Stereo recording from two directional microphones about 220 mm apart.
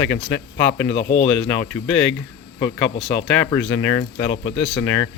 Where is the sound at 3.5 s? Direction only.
10° left (ahead or behind).